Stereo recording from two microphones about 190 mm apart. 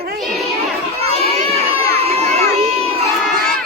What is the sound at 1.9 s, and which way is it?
Crowd, 30° right (ahead or behind).